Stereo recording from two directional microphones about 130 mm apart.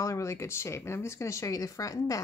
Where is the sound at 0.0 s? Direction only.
25° left (ahead or behind).